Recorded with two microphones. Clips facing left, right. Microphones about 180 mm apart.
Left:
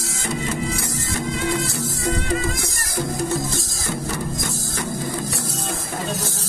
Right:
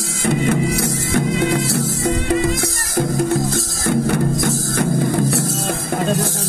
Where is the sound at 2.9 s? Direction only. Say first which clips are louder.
Right 6 dB; 55° right (ahead or behind).